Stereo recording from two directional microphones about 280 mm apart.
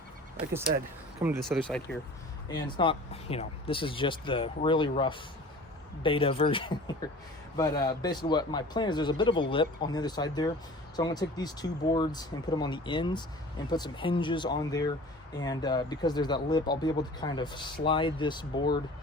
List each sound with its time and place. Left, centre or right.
1.2 s speech: centre
2.5 s speech: centre